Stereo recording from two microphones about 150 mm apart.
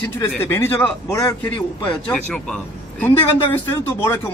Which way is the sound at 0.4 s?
15° left (ahead or behind).